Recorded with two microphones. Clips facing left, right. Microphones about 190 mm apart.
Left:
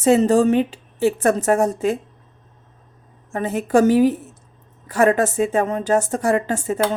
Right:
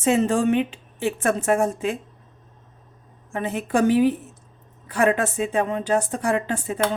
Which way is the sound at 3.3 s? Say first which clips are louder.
Left 6 dB; 40° left (ahead or behind).